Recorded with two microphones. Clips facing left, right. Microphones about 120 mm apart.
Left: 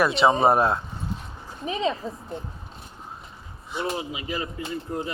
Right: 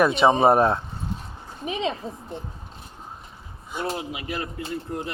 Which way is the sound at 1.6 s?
15° right (ahead or behind).